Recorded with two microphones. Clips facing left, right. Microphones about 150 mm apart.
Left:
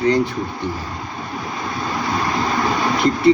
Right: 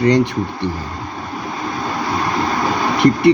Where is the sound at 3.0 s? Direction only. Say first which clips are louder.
Right 3 dB; 65° right (ahead or behind).